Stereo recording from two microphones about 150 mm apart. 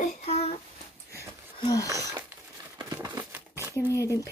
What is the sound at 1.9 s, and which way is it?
Speech, 20° right (ahead or behind).